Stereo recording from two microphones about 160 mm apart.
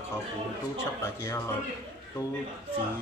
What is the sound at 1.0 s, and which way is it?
Speech, 15° left (ahead or behind).